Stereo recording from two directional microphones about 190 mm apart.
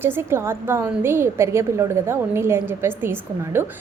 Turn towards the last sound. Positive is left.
turn(degrees=-10)  # may be behind; listen again after turning